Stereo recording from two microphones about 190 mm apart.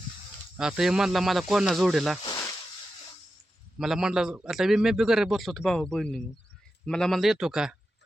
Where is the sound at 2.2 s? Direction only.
20° left (ahead or behind).